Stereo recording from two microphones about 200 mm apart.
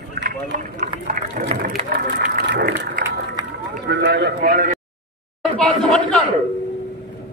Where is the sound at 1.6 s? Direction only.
50° right (ahead or behind).